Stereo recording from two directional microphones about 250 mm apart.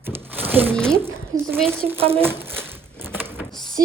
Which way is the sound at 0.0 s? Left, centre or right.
Centre.